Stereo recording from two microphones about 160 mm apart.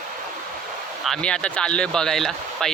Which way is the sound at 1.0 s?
5° left (ahead or behind).